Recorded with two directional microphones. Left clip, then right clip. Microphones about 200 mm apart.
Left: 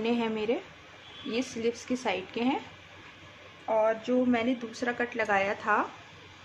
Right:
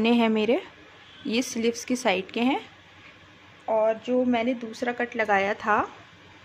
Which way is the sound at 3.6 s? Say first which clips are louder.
Right 3 dB; 35° right (ahead or behind).